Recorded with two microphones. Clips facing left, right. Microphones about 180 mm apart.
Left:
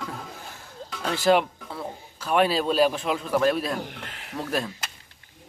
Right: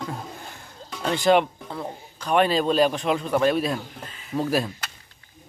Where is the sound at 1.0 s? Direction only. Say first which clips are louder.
Right 2 dB; centre (ahead or behind).